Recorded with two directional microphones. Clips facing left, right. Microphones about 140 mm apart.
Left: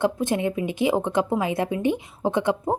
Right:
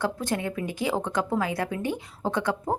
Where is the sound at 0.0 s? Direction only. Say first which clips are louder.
Left 5 dB; 20° left (ahead or behind).